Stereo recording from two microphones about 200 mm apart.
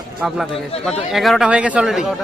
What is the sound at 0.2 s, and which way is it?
Speech, centre (ahead or behind).